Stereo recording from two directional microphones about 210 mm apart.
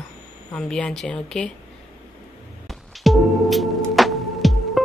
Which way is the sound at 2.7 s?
Centre (ahead or behind).